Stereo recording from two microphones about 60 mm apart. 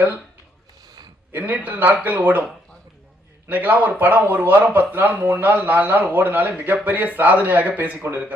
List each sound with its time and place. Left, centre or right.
1.3 s speech: right
3.5 s speech: right